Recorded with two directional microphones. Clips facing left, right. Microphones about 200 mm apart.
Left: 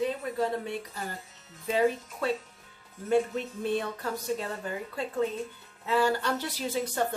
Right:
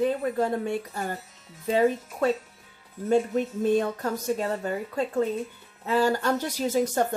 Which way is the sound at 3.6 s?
45° right (ahead or behind).